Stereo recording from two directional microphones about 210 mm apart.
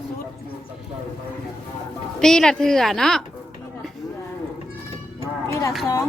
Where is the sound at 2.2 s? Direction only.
5° left (ahead or behind).